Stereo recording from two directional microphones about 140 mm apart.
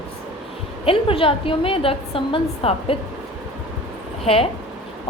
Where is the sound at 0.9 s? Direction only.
40° left (ahead or behind).